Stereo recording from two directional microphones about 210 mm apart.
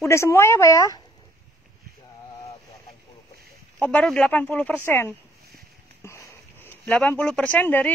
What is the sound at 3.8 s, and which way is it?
Speech, 5° left (ahead or behind).